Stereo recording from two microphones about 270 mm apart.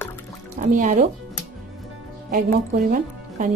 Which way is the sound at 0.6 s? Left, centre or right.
Right.